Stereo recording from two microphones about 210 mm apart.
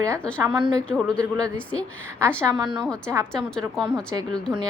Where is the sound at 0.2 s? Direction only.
5° left (ahead or behind).